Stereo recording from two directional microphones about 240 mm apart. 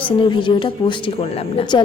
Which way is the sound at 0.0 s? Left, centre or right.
Centre.